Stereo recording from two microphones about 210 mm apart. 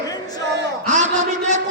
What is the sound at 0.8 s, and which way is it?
Music, 35° right (ahead or behind).